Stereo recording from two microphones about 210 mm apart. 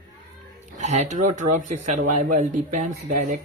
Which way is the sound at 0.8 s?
35° right (ahead or behind).